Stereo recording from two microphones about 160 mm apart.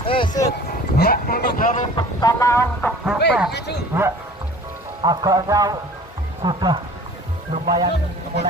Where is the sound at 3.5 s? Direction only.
90° left.